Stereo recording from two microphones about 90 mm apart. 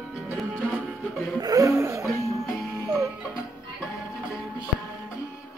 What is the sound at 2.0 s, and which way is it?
Music, centre (ahead or behind).